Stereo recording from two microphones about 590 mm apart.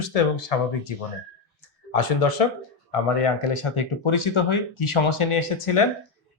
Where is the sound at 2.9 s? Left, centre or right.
Left.